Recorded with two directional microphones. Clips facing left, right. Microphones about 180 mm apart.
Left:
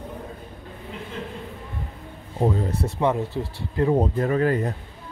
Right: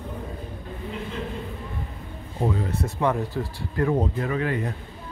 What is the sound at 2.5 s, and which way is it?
Speech, 35° left (ahead or behind).